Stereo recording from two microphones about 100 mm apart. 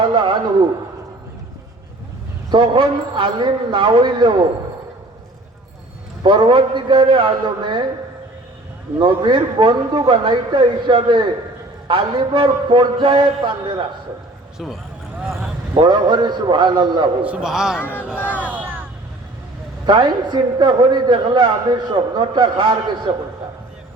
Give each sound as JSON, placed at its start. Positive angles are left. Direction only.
{"t": 0.0, "sound": "a sound", "side_deg": -55}
{"t": 2.5, "sound": "a man's voice", "side_deg": -55}
{"t": 6.2, "sound": "a man's voice", "side_deg": -55}
{"t": 9.0, "sound": "a man's voice", "side_deg": -50}
{"t": 15.7, "sound": "a man's voice", "side_deg": -50}
{"t": 17.2, "sound": "a man's voice", "side_deg": -10}
{"t": 18.4, "sound": "a sound", "side_deg": -15}
{"t": 19.8, "sound": "a man's voice", "side_deg": -50}